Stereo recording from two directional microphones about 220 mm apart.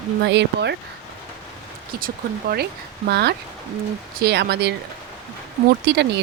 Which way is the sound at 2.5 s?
45° right (ahead or behind).